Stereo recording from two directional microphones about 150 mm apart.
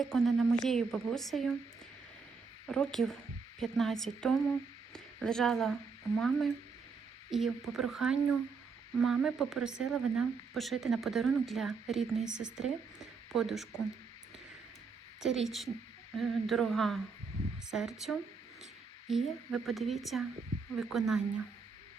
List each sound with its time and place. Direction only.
0.0 s speech: centre (ahead or behind)
2.6 s speech: 5° left (ahead or behind)
12.2 s a woman's voice: 55° right (ahead or behind)
12.5 s speech: 5° right (ahead or behind)
15.2 s speech: centre (ahead or behind)